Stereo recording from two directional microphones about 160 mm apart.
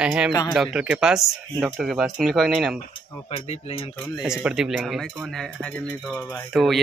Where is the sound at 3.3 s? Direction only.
35° left (ahead or behind).